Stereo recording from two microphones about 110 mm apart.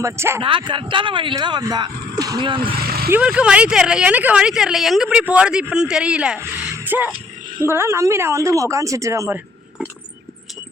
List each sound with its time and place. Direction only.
0.0 s speech: 25° right (ahead or behind)
0.4 s speech: 50° right (ahead or behind)
1.4 s speech: 40° right (ahead or behind)
3.1 s speech: 10° right (ahead or behind)
6.4 s a sound: 15° right (ahead or behind)
7.6 s speech: 20° right (ahead or behind)